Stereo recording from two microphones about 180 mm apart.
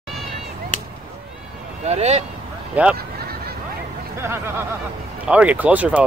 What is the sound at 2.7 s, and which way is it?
Speech, 5° right (ahead or behind).